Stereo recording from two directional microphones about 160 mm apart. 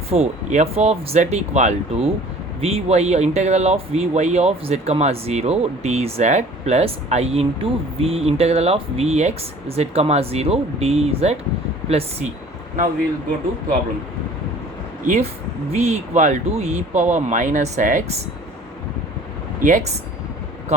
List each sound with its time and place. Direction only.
0.1 s speech: 40° right (ahead or behind)
15.0 s speech: 50° right (ahead or behind)
19.6 s speech: 55° right (ahead or behind)